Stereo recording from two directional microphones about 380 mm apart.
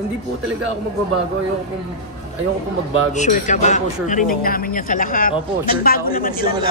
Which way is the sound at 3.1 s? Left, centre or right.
Centre.